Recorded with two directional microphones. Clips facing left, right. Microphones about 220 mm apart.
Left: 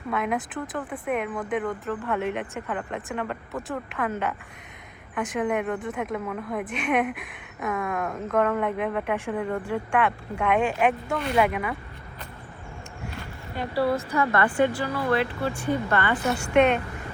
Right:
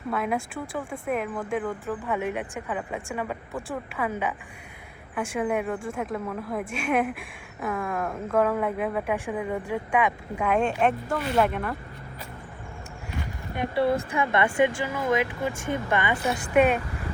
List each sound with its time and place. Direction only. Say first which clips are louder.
0.1 s speech: left 1 dB; 5° right (ahead or behind)
0.9 s speech: even; centre (ahead or behind)
13.6 s speech: right 1 dB; 20° right (ahead or behind); by 16.8 s 5° right (ahead or behind)